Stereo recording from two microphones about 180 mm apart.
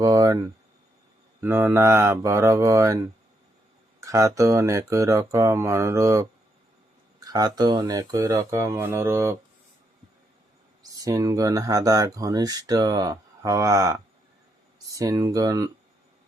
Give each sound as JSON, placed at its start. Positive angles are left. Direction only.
{"t": 0.0, "sound": "speech", "side_deg": -20}
{"t": 1.4, "sound": "speech", "side_deg": -15}
{"t": 7.3, "sound": "speech", "side_deg": -20}
{"t": 11.0, "sound": "speech", "side_deg": -20}